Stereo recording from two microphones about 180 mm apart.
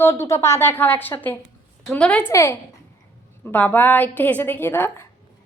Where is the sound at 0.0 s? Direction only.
15° left (ahead or behind).